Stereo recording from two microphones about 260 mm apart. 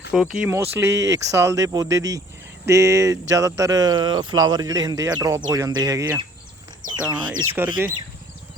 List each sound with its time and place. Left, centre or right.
0.1 s speech: centre